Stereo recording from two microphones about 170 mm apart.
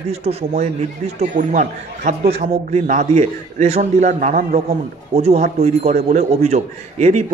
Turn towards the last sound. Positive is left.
turn(degrees=-45)  # may be behind; listen again after turning